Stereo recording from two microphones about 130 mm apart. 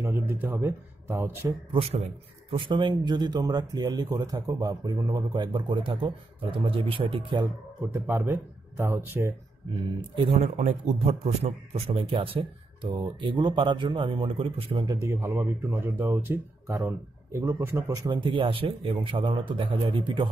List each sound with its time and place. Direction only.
0.0 s speech: 20° right (ahead or behind)
1.7 s a man's voice: 45° right (ahead or behind)
7.9 s speech: 20° right (ahead or behind)
10.1 s a man's voice: 55° right (ahead or behind)
14.9 s speech: 25° right (ahead or behind); by 20.2 s 40° right (ahead or behind)